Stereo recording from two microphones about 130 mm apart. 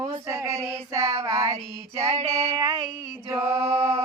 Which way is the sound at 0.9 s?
25° right (ahead or behind).